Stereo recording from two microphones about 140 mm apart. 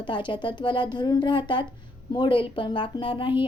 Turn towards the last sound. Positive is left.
turn(degrees=35)  # may be behind; listen again after turning